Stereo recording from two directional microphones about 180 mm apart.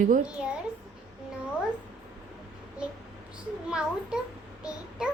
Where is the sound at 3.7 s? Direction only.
5° right (ahead or behind).